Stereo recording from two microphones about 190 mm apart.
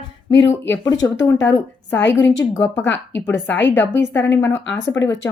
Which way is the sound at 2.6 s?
70° left (ahead or behind).